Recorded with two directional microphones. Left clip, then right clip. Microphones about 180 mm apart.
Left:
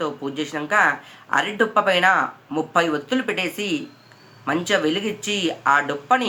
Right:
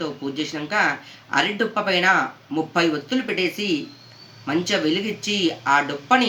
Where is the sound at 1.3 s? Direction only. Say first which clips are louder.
Left 2 dB; 35° left (ahead or behind).